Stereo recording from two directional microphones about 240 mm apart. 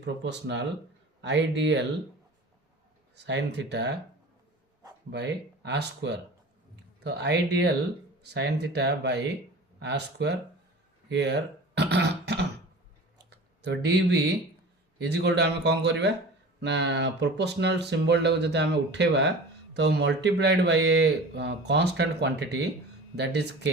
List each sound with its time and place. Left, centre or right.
0.0 s speech: right
3.2 s speech: right
5.1 s speech: right
11.1 s throat clearing: right
13.3 s speech: right